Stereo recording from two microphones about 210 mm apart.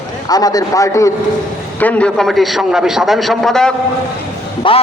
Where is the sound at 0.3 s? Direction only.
15° left (ahead or behind).